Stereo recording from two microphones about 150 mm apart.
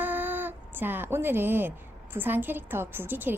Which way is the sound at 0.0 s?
10° right (ahead or behind).